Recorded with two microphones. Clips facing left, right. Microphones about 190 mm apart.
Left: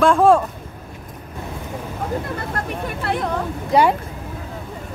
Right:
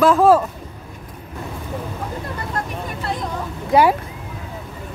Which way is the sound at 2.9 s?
65° left (ahead or behind).